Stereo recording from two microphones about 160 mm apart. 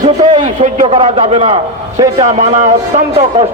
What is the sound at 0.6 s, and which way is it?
A man's voice, 45° right (ahead or behind).